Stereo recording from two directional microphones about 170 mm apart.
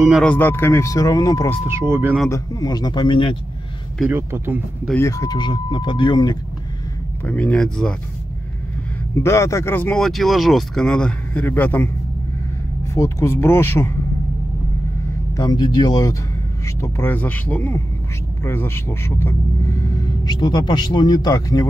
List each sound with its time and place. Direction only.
0.1 s speech: 5° left (ahead or behind)
1.7 s speech: 15° right (ahead or behind)
2.2 s speech: 20° left (ahead or behind)
4.0 s speech: 15° right (ahead or behind)
4.9 s speech: 15° left (ahead or behind)
7.2 s speech: 10° left (ahead or behind)
9.1 s speech: 15° left (ahead or behind)
12.9 s speech: 15° left (ahead or behind)
15.3 s speech: 20° left (ahead or behind)
20.3 s speech: 25° left (ahead or behind)